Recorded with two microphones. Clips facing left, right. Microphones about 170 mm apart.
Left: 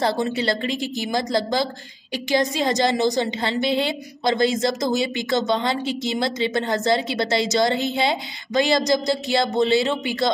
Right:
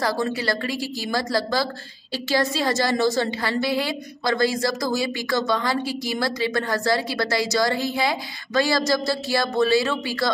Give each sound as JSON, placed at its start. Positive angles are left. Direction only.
{"t": 0.0, "sound": "a woman's voice", "side_deg": 20}